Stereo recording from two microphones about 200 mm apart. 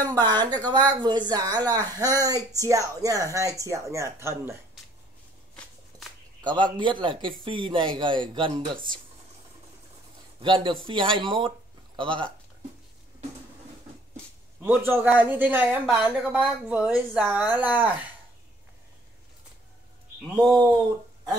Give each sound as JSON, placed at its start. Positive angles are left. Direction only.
{"t": 0.0, "sound": "speech", "side_deg": -20}
{"t": 6.4, "sound": "speech", "side_deg": -25}
{"t": 10.4, "sound": "speech", "side_deg": -25}
{"t": 14.6, "sound": "speech", "side_deg": -10}
{"t": 20.3, "sound": "speech", "side_deg": -20}